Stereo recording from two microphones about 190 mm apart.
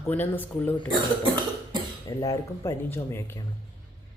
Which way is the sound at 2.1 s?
15° left (ahead or behind).